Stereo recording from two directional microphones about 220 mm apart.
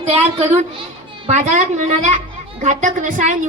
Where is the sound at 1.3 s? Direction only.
30° right (ahead or behind).